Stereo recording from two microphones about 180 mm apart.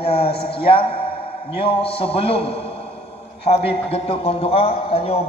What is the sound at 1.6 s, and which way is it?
A man's voice, 30° left (ahead or behind).